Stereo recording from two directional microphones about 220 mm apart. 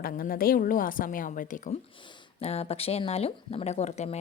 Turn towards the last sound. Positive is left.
turn(degrees=30)  # may be behind; listen again after turning